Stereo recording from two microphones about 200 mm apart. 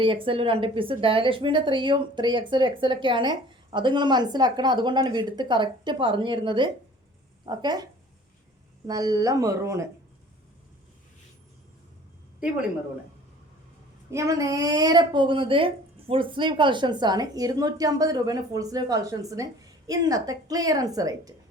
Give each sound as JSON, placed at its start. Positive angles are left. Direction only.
{"t": 0.0, "sound": "a woman's voice", "side_deg": -25}
{"t": 8.9, "sound": "speech", "side_deg": -20}
{"t": 14.1, "sound": "a woman's voice", "side_deg": -15}